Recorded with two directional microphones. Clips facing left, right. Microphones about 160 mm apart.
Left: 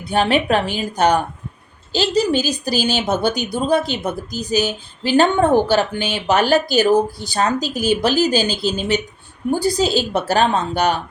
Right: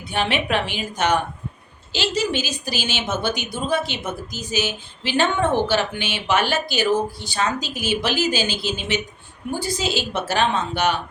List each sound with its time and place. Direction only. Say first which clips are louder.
0.0 s speech: left 6 dB; 40° left (ahead or behind)